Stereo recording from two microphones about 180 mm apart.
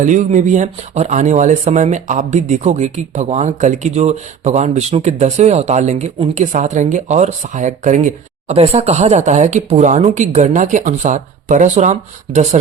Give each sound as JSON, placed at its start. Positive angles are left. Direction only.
{"t": 0.0, "sound": "speech", "side_deg": -45}